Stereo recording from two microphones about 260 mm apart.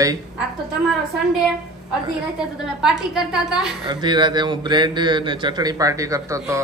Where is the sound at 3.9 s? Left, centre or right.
Centre.